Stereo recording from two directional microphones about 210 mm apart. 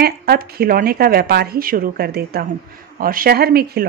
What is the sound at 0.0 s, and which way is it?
A woman's voice, 45° right (ahead or behind).